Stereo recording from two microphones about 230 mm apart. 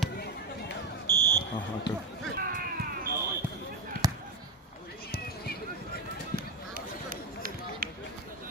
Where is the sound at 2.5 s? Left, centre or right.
Right.